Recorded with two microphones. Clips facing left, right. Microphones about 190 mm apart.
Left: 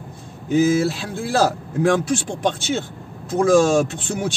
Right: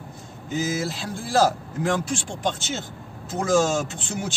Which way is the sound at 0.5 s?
60° left (ahead or behind).